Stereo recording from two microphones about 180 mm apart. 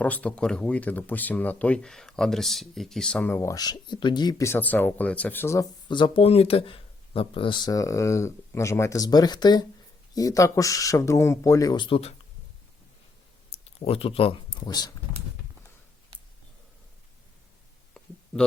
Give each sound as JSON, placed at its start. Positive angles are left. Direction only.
{"t": 0.0, "sound": "speech", "side_deg": 5}
{"t": 5.9, "sound": "speech", "side_deg": 30}
{"t": 13.5, "sound": "speech", "side_deg": 35}